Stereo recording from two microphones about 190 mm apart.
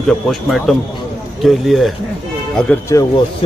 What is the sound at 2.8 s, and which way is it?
Speech, 15° left (ahead or behind).